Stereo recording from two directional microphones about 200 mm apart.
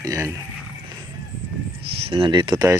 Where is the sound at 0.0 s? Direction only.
15° right (ahead or behind).